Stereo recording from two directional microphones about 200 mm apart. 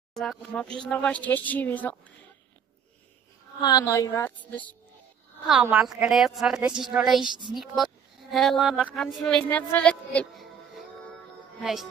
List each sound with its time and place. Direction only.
0.1 s speech: centre (ahead or behind)
3.6 s speech: 15° left (ahead or behind)
5.5 s speech: 5° right (ahead or behind)
7.2 s speech: 25° right (ahead or behind)
7.5 s speech: centre (ahead or behind)
11.6 s speech: centre (ahead or behind)